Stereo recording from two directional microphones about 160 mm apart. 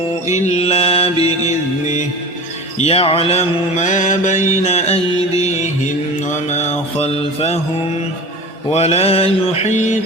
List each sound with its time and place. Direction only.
0.3 s mantra: 45° left (ahead or behind)
8.7 s mantra: 40° left (ahead or behind)